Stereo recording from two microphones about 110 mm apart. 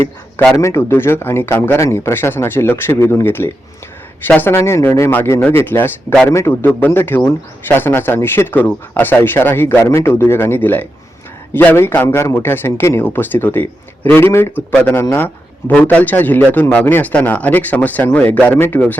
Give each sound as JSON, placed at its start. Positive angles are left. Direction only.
{"t": 0.5, "sound": "a man's voice", "side_deg": 25}